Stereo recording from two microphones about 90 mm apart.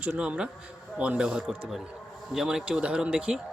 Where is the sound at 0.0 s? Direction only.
10° right (ahead or behind).